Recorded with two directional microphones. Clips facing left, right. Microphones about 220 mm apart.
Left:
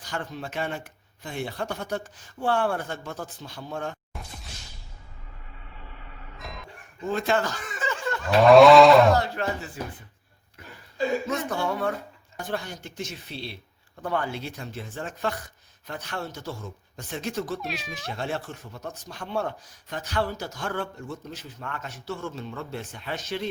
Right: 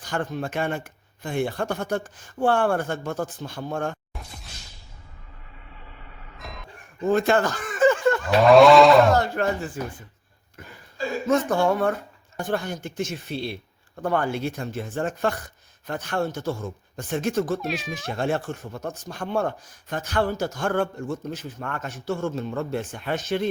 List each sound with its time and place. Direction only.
0.0 s speech: 50° right (ahead or behind)
6.4 s bow-wow: centre (ahead or behind)
7.0 s snicker: 50° right (ahead or behind)
8.4 s a sound: centre (ahead or behind)
9.1 s speech: 50° right (ahead or behind)
11.3 s speech: 50° right (ahead or behind)
17.6 s a sound: centre (ahead or behind)
17.9 s speech: 50° right (ahead or behind)